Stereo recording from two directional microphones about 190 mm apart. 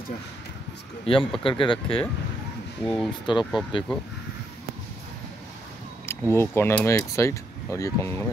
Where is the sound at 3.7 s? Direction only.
25° left (ahead or behind).